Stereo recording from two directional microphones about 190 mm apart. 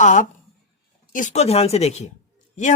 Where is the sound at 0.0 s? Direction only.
40° left (ahead or behind).